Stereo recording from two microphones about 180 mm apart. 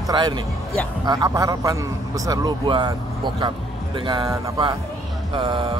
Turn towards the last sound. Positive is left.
turn(degrees=-30)  # may be behind; listen again after turning